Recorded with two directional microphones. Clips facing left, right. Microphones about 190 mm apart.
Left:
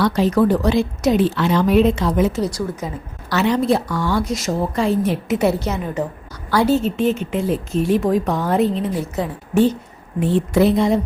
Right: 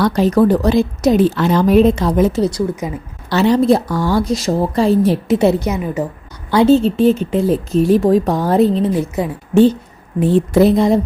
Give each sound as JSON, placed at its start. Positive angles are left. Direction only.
{"t": 0.0, "sound": "a woman's voice", "side_deg": -40}
{"t": 5.5, "sound": "a woman's voice", "side_deg": -10}
{"t": 6.5, "sound": "a woman's voice", "side_deg": -25}
{"t": 9.2, "sound": "a woman's voice", "side_deg": -10}
{"t": 10.2, "sound": "a woman's voice", "side_deg": -40}